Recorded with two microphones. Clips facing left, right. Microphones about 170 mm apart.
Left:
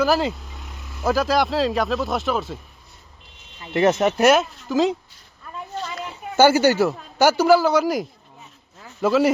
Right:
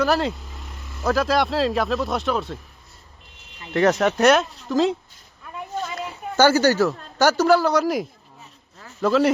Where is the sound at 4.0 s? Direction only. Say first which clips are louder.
Left 1 dB; 5° left (ahead or behind).